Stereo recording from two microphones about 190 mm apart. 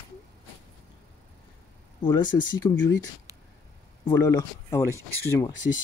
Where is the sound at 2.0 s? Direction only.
25° left (ahead or behind).